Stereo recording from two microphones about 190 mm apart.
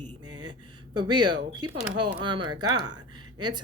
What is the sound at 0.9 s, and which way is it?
Speech, 25° right (ahead or behind).